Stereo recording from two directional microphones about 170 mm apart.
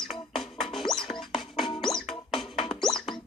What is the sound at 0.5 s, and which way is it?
Music, centre (ahead or behind).